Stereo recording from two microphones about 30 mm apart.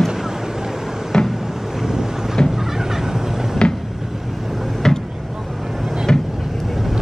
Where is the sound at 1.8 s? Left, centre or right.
Centre.